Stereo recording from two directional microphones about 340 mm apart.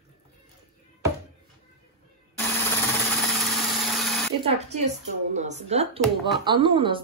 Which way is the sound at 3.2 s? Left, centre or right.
Centre.